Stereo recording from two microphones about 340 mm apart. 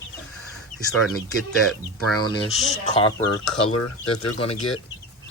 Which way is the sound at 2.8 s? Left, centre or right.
Centre.